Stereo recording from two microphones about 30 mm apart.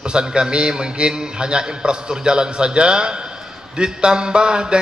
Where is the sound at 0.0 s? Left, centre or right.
Right.